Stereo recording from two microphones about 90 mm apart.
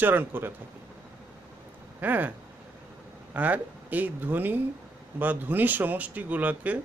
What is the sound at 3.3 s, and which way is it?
Speech, 20° right (ahead or behind).